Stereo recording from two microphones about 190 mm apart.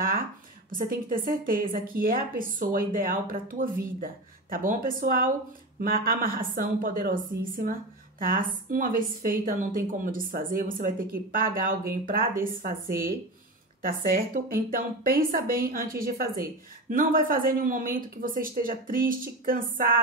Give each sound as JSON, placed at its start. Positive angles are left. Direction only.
{"t": 0.7, "sound": "a woman's voice", "side_deg": -45}